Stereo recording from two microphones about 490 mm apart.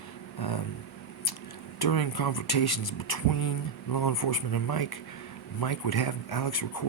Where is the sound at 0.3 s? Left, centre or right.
Left.